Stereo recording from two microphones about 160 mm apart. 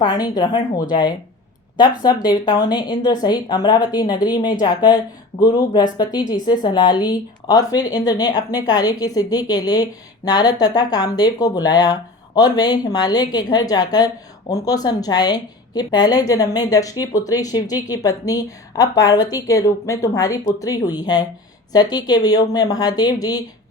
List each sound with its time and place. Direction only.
0.0 s a woman's voice: 25° left (ahead or behind)
2.2 s a woman's voice: 25° left (ahead or behind)